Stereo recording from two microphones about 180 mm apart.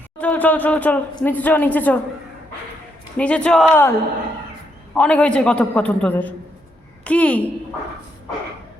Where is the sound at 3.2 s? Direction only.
5° left (ahead or behind).